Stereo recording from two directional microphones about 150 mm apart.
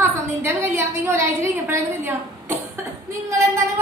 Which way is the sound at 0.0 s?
15° right (ahead or behind).